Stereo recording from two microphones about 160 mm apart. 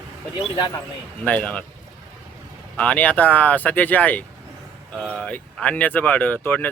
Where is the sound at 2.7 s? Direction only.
10° left (ahead or behind).